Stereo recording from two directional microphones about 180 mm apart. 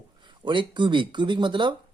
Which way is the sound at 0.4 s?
25° right (ahead or behind).